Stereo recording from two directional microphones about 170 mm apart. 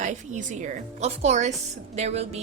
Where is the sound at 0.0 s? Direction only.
45° right (ahead or behind).